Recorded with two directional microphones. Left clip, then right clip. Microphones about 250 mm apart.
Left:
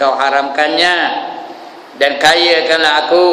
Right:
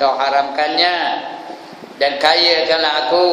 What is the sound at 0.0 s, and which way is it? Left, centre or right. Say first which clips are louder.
A man's voice: left 3 dB; centre.